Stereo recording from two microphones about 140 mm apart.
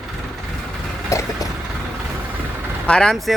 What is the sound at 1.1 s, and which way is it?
Vehicle, 20° left (ahead or behind).